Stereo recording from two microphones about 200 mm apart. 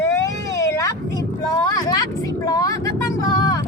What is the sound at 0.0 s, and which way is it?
Vehicle, 15° left (ahead or behind).